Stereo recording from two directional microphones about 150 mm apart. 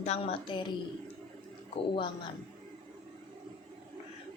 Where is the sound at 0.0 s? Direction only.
45° left (ahead or behind).